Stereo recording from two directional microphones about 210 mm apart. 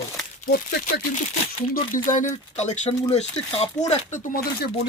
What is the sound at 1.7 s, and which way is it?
Speech, 40° left (ahead or behind).